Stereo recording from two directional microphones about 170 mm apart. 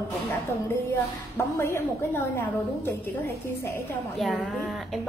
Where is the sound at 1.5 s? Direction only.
15° left (ahead or behind).